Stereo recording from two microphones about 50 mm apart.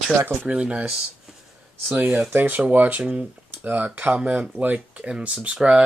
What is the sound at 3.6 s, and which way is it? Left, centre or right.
Speech, right.